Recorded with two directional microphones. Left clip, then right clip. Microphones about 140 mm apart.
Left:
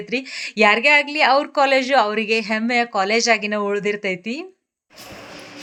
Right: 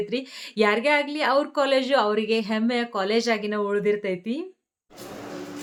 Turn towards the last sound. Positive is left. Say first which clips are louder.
# left 2 dB
turn(degrees=25)  # may be behind; listen again after turning